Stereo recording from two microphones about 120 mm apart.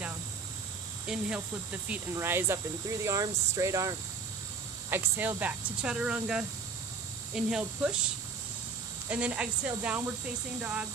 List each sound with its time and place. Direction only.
1.0 s speech: 5° right (ahead or behind)
2.1 s speech: 20° right (ahead or behind)
9.0 s speech: 10° right (ahead or behind)